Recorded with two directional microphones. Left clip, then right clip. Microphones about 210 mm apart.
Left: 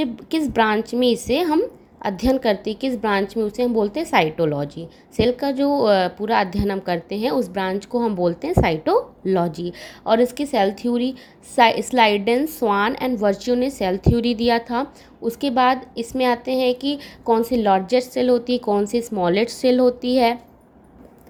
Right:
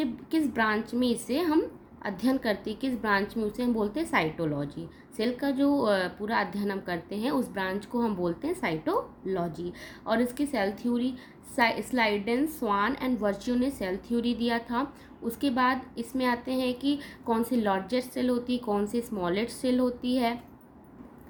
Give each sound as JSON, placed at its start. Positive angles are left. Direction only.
{"t": 0.0, "sound": "a woman's voice", "side_deg": 35}